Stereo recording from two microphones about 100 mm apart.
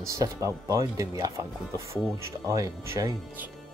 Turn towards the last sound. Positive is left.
turn(degrees=-35)  # may be behind; listen again after turning